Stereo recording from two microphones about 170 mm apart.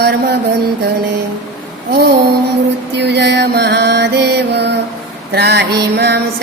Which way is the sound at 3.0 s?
80° right.